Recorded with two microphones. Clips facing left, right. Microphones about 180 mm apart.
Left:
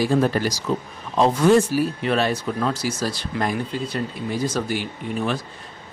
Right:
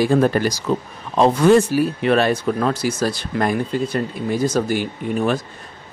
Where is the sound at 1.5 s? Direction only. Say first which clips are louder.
Right 3 dB; 70° right (ahead or behind).